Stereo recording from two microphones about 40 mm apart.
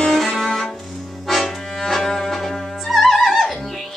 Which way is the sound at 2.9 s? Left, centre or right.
Centre.